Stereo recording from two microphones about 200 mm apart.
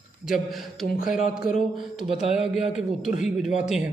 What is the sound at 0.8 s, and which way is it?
Speech, 45° left (ahead or behind).